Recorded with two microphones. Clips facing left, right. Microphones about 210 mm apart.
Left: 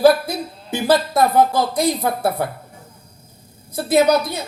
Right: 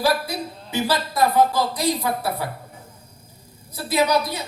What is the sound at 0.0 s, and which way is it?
A woman's voice, 50° left (ahead or behind).